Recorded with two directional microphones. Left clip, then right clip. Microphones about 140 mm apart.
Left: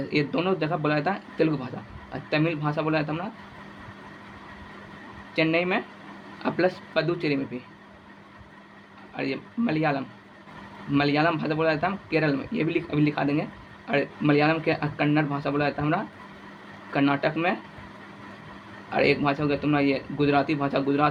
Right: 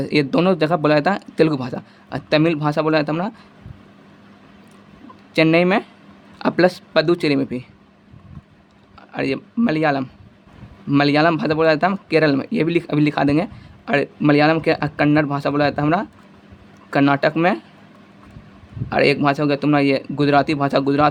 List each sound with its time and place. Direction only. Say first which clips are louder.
0.0 s speech: right 8 dB; 70° right (ahead or behind); by 3.3 s 90° right
5.3 s speech: right 8 dB; 85° right
9.1 s a man's voice: right 8 dB; 75° right (ahead or behind)
18.9 s a man's voice: right 6 dB; 65° right (ahead or behind)